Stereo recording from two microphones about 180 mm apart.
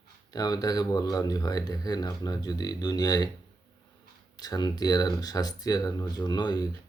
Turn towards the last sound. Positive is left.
turn(degrees=20)  # may be behind; listen again after turning